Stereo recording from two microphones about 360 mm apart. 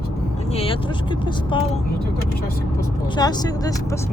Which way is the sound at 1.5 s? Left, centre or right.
Centre.